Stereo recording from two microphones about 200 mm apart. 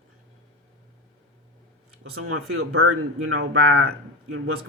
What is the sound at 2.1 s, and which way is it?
Speech, 90° right.